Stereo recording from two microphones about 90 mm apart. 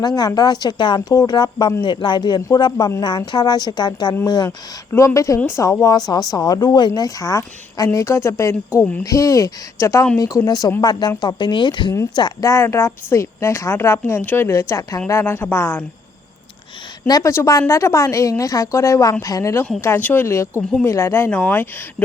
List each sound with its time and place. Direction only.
0.0 s a woman's voice: 45° left (ahead or behind)
4.4 s a woman's voice: 30° left (ahead or behind)
6.1 s a woman's voice: 45° left (ahead or behind)
12.4 s a woman's voice: 35° left (ahead or behind)
17.1 s a woman's voice: 45° left (ahead or behind)
19.8 s a woman's voice: 25° left (ahead or behind)